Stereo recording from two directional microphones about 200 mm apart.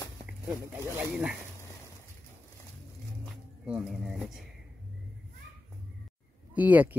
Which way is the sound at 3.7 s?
5° right (ahead or behind).